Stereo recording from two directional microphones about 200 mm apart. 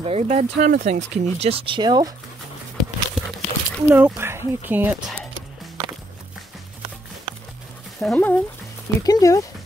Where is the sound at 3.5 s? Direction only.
35° left (ahead or behind).